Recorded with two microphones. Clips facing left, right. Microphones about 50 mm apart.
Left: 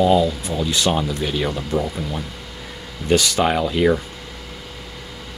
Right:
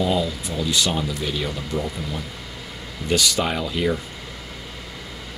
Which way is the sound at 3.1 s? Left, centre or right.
Left.